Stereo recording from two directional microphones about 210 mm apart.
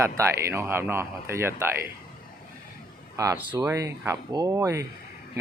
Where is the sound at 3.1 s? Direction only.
15° right (ahead or behind).